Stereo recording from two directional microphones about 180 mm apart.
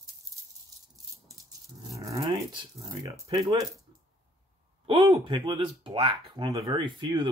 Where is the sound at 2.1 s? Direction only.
25° right (ahead or behind).